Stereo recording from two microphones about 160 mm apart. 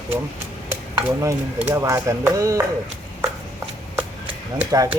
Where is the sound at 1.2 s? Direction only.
15° right (ahead or behind).